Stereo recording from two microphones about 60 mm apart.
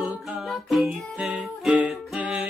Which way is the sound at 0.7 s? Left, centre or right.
Centre.